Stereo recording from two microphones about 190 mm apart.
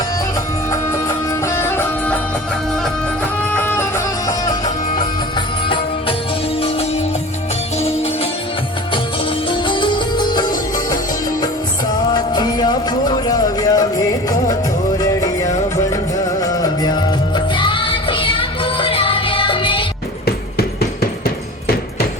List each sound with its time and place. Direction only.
0.7 s music: 15° left (ahead or behind)
3.5 s music: 10° left (ahead or behind)
5.6 s music: 25° left (ahead or behind)
7.8 s music: 35° left (ahead or behind)
9.5 s music: 25° left (ahead or behind)
12.1 s music: 20° left (ahead or behind)
14.9 s music: 15° left (ahead or behind)
20.2 s hammer: 55° left (ahead or behind)